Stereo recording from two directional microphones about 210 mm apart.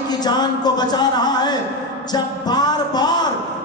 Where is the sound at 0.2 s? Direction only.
20° left (ahead or behind).